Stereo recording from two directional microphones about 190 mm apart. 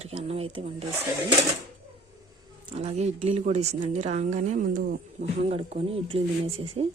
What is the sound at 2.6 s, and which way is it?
Speech, 30° right (ahead or behind).